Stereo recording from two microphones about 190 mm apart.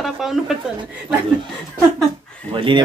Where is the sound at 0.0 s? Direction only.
Centre (ahead or behind).